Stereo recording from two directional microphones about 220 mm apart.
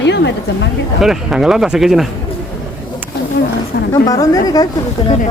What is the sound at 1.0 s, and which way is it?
Speech, centre (ahead or behind).